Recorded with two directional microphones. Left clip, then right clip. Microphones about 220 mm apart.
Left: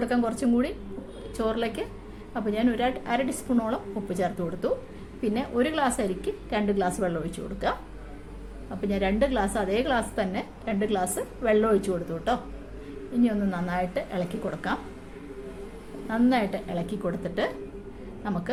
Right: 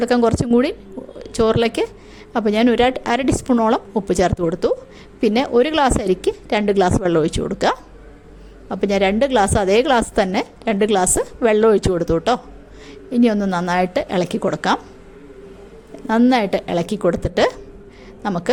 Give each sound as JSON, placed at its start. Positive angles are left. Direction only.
{"t": 0.0, "sound": "a woman's voice", "side_deg": -45}
{"t": 16.0, "sound": "a woman's voice", "side_deg": -45}